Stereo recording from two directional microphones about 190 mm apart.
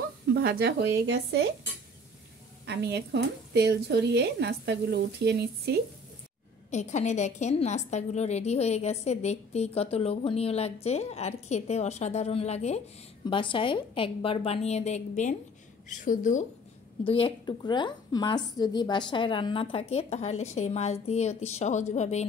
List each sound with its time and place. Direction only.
0.3 s speech: 55° right (ahead or behind)
2.6 s speech: 60° right (ahead or behind)
6.7 s a woman's voice: 40° left (ahead or behind)
17.0 s a woman's voice: 30° left (ahead or behind)